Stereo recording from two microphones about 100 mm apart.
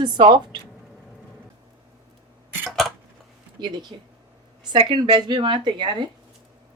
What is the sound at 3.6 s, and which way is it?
Speech, 50° right (ahead or behind).